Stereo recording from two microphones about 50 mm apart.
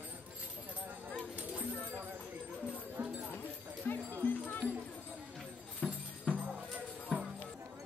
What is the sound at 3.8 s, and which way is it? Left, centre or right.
Music, left.